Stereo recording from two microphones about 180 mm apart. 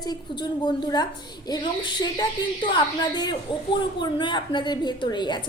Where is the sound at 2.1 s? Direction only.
25° left (ahead or behind).